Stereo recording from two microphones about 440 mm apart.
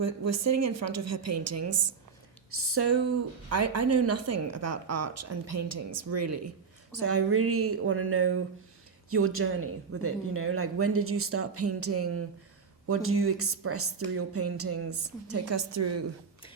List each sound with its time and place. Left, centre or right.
0.0 s speech: right